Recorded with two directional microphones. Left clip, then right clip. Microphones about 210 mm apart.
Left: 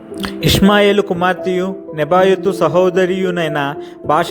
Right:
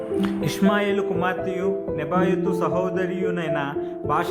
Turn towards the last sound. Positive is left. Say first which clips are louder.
# left 8 dB
turn(degrees=30)  # may be behind; listen again after turning